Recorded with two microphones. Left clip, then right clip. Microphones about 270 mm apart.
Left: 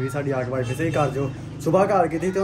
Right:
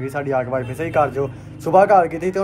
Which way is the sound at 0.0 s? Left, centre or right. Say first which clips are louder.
Right 4 dB; centre.